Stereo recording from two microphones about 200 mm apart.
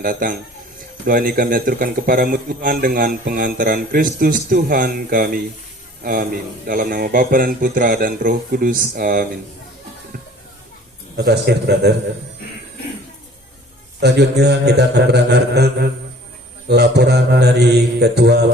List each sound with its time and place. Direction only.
0.0 s speech: 45° right (ahead or behind)
11.2 s speech: 55° right (ahead or behind)
14.0 s a man's voice: 55° right (ahead or behind)